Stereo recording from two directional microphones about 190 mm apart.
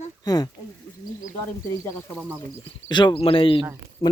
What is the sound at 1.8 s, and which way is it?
Speech, 10° left (ahead or behind).